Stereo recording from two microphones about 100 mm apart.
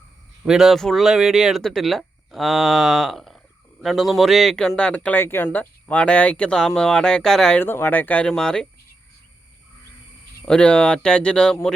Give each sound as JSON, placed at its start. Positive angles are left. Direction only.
{"t": 0.4, "sound": "speech", "side_deg": -5}
{"t": 7.6, "sound": "speech", "side_deg": 20}
{"t": 10.4, "sound": "speech", "side_deg": 10}